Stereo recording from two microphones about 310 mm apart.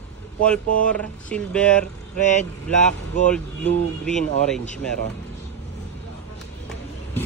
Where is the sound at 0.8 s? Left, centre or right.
Centre.